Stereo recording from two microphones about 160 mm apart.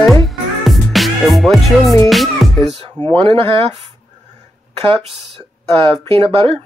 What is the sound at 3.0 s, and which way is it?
Speech, 35° right (ahead or behind).